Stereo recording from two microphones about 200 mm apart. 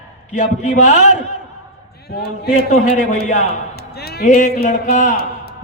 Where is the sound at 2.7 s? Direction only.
35° left (ahead or behind).